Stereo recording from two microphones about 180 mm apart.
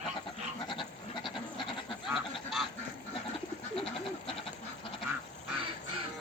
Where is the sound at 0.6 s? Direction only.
25° left (ahead or behind).